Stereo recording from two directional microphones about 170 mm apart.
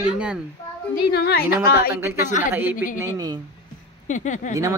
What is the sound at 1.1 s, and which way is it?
Speech, 65° left (ahead or behind).